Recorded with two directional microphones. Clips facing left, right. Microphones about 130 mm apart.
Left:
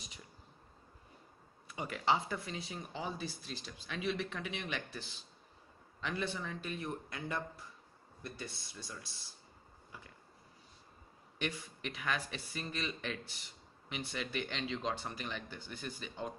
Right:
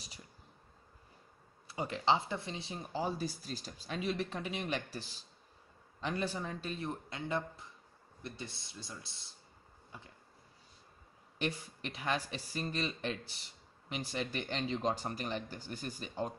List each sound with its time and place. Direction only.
1.7 s speech: 30° right (ahead or behind)
11.3 s speech: 35° right (ahead or behind)